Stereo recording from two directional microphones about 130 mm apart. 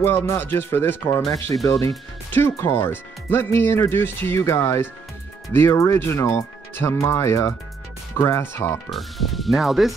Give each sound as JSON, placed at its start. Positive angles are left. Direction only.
{"t": 0.0, "sound": "speech", "side_deg": 15}
{"t": 8.9, "sound": "speech", "side_deg": 0}